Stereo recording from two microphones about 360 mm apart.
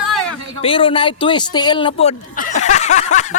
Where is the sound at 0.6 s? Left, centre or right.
Centre.